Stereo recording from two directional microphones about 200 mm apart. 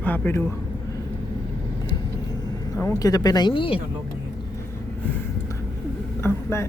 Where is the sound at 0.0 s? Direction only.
10° left (ahead or behind).